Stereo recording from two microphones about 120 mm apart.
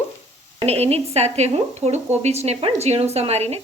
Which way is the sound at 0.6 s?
60° right (ahead or behind).